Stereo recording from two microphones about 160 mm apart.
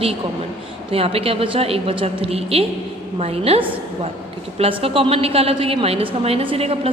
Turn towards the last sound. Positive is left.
turn(degrees=-40)  # may be behind; listen again after turning